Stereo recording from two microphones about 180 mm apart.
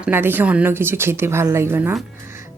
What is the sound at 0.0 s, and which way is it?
Speech, 10° right (ahead or behind).